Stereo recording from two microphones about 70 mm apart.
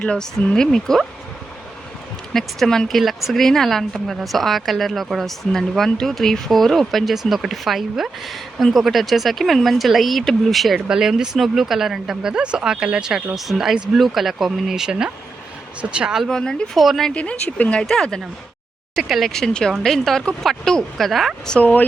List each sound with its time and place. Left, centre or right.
0.0 s speech: centre
2.3 s speech: centre
16.2 s speech: centre
17.1 s speech: centre
21.5 s speech: left